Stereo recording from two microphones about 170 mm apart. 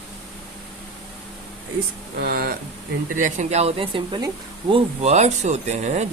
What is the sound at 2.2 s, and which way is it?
Speech, 60° right (ahead or behind).